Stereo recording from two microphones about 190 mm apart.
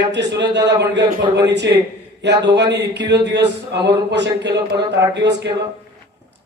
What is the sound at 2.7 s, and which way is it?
A man's voice, 65° right (ahead or behind).